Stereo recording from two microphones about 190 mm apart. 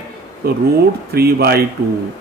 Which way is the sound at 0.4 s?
55° right (ahead or behind).